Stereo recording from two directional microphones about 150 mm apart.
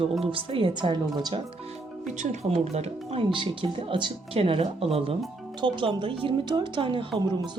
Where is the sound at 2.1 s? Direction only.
50° right (ahead or behind).